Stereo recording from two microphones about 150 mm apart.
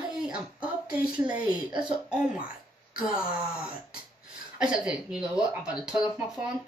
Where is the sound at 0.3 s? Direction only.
10° right (ahead or behind).